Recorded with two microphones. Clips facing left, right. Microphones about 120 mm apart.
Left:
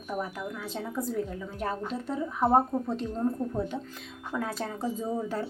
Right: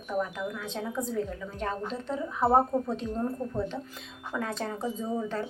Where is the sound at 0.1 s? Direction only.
10° left (ahead or behind).